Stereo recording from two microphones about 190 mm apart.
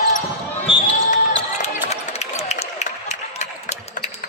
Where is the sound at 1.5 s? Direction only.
35° left (ahead or behind).